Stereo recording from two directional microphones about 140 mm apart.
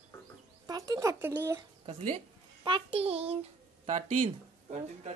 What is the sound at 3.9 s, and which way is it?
Speech, 60° right (ahead or behind).